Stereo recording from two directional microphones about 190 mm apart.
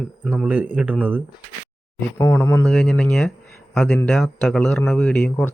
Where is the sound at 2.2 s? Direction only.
15° left (ahead or behind).